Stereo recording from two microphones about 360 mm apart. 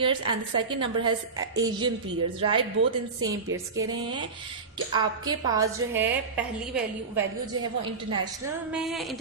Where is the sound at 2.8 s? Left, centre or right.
Right.